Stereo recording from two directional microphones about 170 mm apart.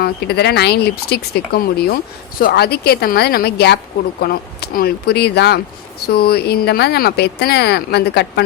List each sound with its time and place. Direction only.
0.0 s speech: 70° left (ahead or behind)